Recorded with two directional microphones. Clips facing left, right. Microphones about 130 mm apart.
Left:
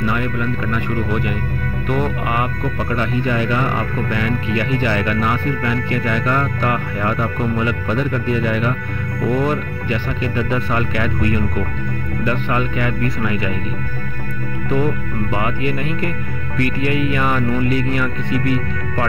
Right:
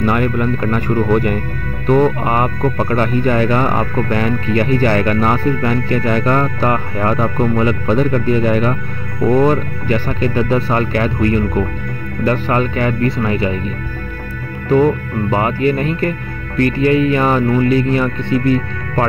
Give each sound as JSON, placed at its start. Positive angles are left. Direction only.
{"t": 0.0, "sound": "speech", "side_deg": -50}
{"t": 15.3, "sound": "speech", "side_deg": -40}